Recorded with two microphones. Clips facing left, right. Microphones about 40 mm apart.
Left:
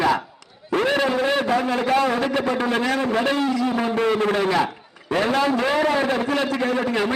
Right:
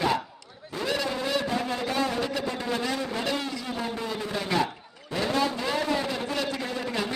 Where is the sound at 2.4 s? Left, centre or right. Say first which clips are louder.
Left 8 dB; left.